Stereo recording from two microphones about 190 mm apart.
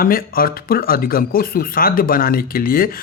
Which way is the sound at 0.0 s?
50° left (ahead or behind).